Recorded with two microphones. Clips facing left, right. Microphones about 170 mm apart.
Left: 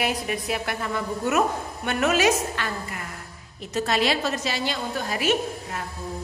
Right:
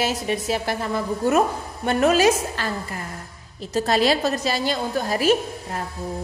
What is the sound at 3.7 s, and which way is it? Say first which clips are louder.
A woman's voice: right 4 dB; 40° right (ahead or behind).